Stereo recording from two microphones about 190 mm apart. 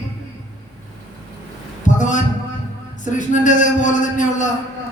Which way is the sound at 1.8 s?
40° left (ahead or behind).